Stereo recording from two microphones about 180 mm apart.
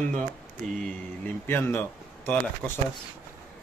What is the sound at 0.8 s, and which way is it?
Speech, 10° left (ahead or behind).